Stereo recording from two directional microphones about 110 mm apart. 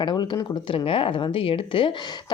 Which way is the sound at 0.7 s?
55° left (ahead or behind).